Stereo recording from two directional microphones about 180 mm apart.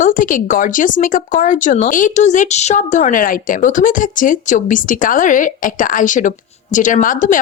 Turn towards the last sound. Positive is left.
turn(degrees=45)  # may be behind; listen again after turning